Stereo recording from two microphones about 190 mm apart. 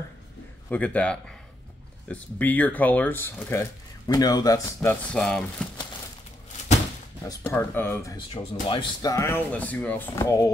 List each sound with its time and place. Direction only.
0.7 s speech: 5° left (ahead or behind)
5.1 s speech: 5° left (ahead or behind)
7.4 s speech: 10° left (ahead or behind)